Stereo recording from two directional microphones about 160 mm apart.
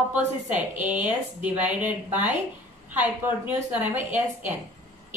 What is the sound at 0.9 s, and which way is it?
Speech, 10° right (ahead or behind).